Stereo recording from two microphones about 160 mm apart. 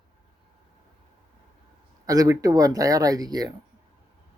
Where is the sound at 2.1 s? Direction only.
20° right (ahead or behind).